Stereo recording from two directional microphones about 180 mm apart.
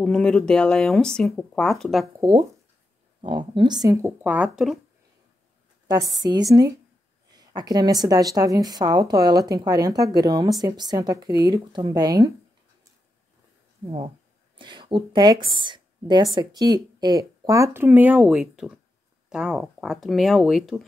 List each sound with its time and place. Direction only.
0.0 s speech: 5° left (ahead or behind)
2.1 s a woman's voice: 20° right (ahead or behind); by 4.7 s 5° right (ahead or behind)
5.9 s a woman's voice: 20° right (ahead or behind)
13.8 s speech: 35° right (ahead or behind); by 20.8 s centre (ahead or behind)